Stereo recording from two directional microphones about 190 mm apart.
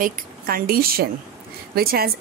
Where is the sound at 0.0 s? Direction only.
50° right (ahead or behind).